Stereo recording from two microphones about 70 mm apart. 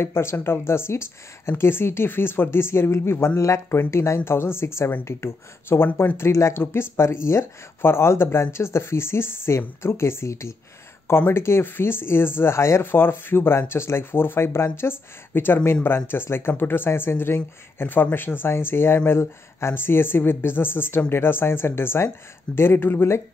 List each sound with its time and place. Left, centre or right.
0.0 s speech: left